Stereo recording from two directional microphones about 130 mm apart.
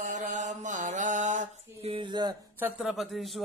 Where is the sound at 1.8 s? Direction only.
40° right (ahead or behind).